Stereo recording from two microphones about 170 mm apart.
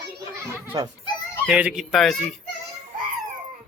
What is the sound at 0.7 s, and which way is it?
Speech, 25° right (ahead or behind).